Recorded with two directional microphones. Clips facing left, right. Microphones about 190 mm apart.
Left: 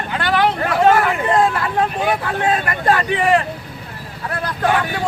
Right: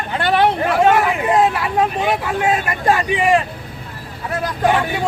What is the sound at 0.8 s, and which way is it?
Hubbub, centre (ahead or behind).